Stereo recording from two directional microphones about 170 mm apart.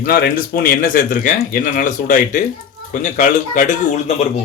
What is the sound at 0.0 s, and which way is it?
Speech, 60° left (ahead or behind).